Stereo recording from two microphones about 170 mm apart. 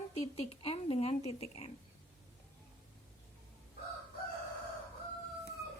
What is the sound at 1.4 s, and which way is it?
Speech, 35° left (ahead or behind).